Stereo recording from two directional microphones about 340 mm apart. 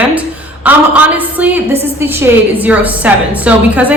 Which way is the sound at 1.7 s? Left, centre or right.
Centre.